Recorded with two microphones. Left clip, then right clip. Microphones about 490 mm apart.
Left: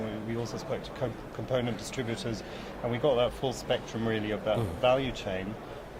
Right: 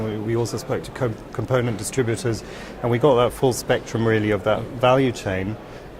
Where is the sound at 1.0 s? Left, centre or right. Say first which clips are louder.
Right 9 dB; right.